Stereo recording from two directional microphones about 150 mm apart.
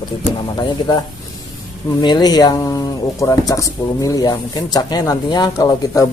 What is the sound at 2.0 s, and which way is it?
A man's voice, 30° left (ahead or behind).